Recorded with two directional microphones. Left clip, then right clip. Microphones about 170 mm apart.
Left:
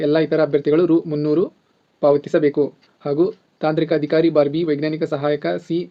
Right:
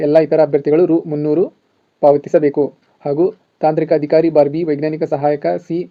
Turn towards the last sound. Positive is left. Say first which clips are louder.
# right 4 dB
turn(degrees=-20)  # may be behind; listen again after turning